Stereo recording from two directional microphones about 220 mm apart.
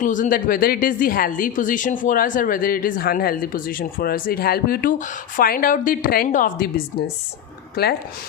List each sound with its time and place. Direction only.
0.0 s a woman's voice: 35° left (ahead or behind)